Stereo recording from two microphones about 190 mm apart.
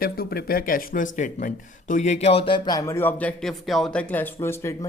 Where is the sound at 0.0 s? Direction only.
55° left (ahead or behind).